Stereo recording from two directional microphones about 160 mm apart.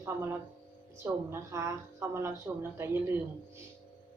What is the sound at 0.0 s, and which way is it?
A woman's voice, 15° right (ahead or behind).